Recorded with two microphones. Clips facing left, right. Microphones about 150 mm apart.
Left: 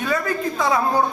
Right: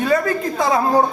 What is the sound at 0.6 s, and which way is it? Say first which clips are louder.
Speech: right 4 dB; 40° right (ahead or behind).